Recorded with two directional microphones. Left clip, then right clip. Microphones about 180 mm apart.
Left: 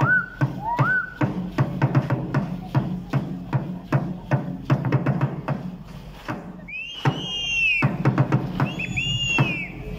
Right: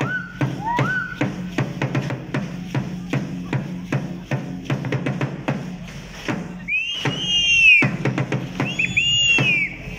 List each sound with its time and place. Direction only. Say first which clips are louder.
0.0 s music: left 4 dB; 20° right (ahead or behind)
6.9 s music: right 6 dB; 20° right (ahead or behind)